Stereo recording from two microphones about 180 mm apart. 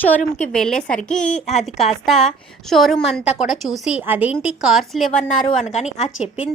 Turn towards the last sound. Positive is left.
turn(degrees=-5)  # may be behind; listen again after turning